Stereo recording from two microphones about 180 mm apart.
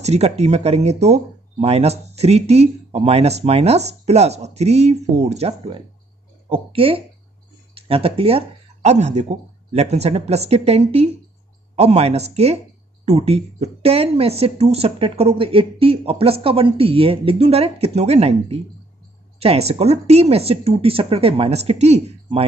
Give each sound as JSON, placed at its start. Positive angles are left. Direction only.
{"t": 0.0, "sound": "speech", "side_deg": -35}